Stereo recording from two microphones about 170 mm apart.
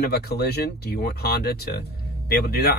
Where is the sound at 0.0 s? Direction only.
70° left (ahead or behind).